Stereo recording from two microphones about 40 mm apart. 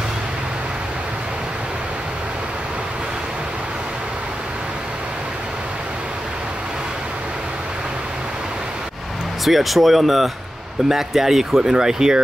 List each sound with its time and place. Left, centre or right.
9.4 s speech: centre